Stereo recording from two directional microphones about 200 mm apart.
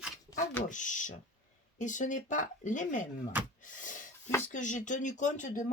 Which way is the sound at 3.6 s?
40° left (ahead or behind).